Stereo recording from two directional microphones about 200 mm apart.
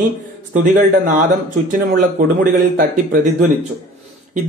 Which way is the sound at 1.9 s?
45° right (ahead or behind).